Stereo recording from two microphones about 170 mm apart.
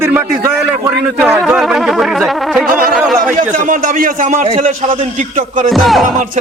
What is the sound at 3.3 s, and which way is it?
A man's voice, 50° right (ahead or behind).